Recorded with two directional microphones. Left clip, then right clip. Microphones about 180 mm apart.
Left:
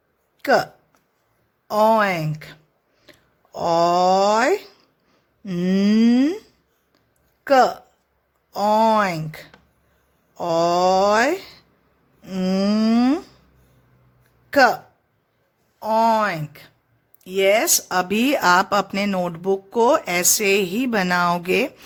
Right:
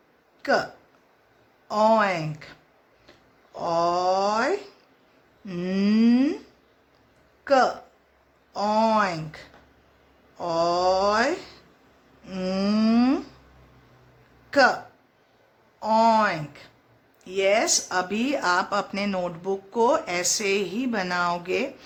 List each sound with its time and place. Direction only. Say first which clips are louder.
0.4 s speech: left 5 dB; 50° left (ahead or behind)
1.7 s speech: left 3 dB; 50° left (ahead or behind)
14.5 s speech: left 4 dB; 45° left (ahead or behind)
15.8 s speech: left 2 dB; 50° left (ahead or behind)